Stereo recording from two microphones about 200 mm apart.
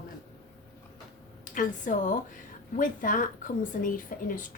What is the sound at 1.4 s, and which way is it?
A woman's voice, 40° left (ahead or behind).